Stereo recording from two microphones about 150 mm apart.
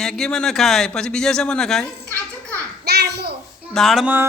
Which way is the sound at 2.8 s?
90° right.